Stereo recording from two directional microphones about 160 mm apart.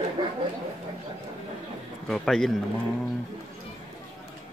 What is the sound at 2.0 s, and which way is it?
Speech, 5° left (ahead or behind).